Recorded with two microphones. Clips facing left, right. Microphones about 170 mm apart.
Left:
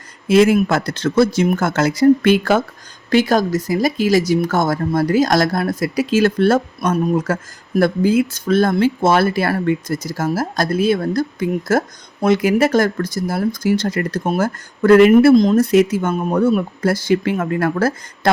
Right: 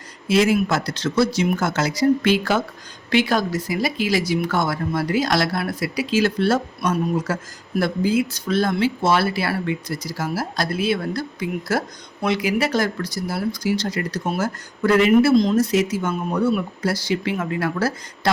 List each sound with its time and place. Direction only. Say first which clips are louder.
0.3 s speech: left 5 dB; 50° left (ahead or behind)